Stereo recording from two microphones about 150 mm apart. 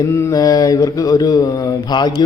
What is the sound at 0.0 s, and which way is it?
Mantra, 20° left (ahead or behind).